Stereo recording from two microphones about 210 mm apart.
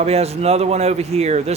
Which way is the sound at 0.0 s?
30° right (ahead or behind).